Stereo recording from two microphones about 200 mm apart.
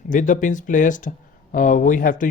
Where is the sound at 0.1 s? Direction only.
40° left (ahead or behind).